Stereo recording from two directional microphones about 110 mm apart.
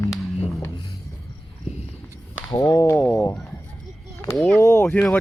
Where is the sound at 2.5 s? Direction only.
35° left (ahead or behind).